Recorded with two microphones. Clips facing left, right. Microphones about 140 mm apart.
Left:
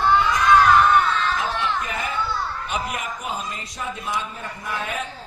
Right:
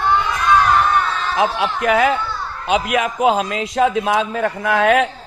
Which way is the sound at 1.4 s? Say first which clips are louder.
Right 7 dB; 85° right.